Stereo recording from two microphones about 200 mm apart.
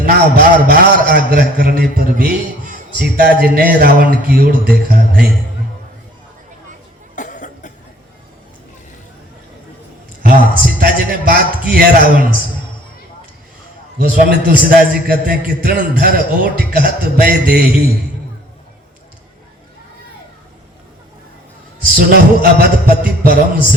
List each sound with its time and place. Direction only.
0.0 s a man's voice: 50° right (ahead or behind)
7.2 s cough: 40° left (ahead or behind)
10.2 s a man's voice: 45° right (ahead or behind)
14.0 s a man's voice: 50° right (ahead or behind)
21.9 s a man's voice: 50° right (ahead or behind)